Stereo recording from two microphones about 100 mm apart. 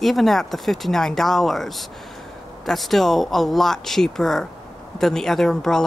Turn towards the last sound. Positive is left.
turn(degrees=5)  # may be behind; listen again after turning